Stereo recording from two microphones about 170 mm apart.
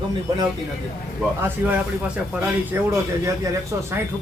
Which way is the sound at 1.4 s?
10° right (ahead or behind).